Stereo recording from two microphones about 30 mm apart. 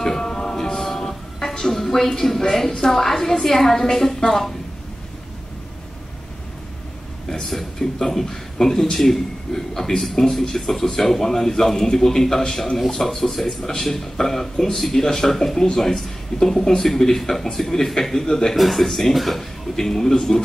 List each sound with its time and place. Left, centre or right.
0.0 s train: centre
1.6 s music: centre
2.8 s speech: centre
7.4 s a man's voice: centre
18.6 s a man's voice: centre
19.7 s speech: centre